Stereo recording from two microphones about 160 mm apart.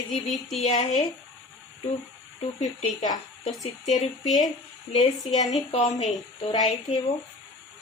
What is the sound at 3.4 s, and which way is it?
Speech, 45° left (ahead or behind).